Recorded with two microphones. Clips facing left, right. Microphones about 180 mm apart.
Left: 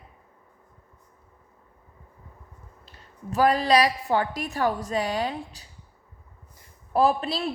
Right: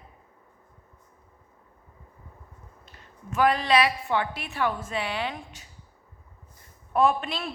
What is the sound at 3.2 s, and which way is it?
A woman's voice, 35° left (ahead or behind).